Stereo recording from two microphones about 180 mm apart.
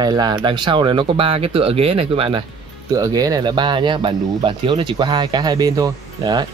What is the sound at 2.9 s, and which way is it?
Speech, 20° right (ahead or behind).